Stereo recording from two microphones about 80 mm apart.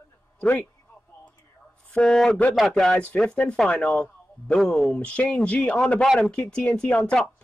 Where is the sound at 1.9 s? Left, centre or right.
Centre.